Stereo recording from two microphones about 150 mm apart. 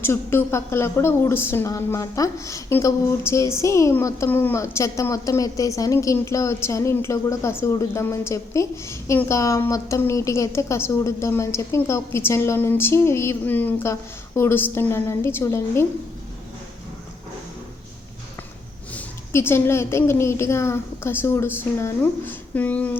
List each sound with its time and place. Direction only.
0.0 s a woman's voice: 15° left (ahead or behind)
18.9 s a woman's voice: 15° left (ahead or behind)